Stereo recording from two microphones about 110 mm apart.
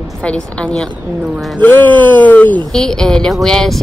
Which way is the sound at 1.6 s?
15° left (ahead or behind).